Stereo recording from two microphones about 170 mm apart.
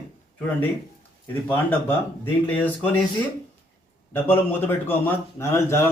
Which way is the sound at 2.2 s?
10° left (ahead or behind).